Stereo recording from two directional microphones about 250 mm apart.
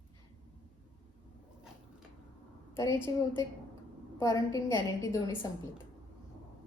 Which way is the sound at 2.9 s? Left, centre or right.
Centre.